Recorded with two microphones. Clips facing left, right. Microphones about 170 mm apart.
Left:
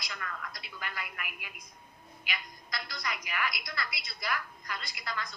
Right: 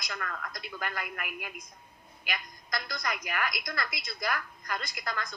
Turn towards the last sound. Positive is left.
turn(degrees=-45)  # may be behind; listen again after turning